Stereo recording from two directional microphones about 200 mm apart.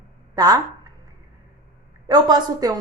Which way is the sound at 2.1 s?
20° right (ahead or behind).